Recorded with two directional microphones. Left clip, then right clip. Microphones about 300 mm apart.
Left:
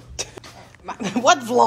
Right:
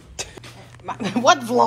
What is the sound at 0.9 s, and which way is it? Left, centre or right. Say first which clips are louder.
Speech: even; centre.